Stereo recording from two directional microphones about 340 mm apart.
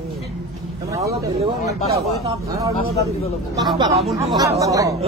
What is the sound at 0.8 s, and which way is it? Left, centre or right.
Speech, centre.